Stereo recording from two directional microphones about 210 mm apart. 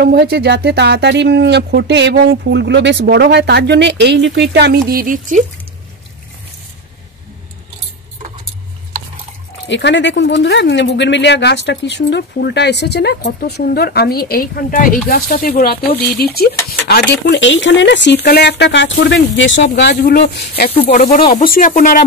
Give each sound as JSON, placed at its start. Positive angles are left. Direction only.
{"t": 0.0, "sound": "speech", "side_deg": -50}
{"t": 9.7, "sound": "speech", "side_deg": 60}
{"t": 19.8, "sound": "speech", "side_deg": 50}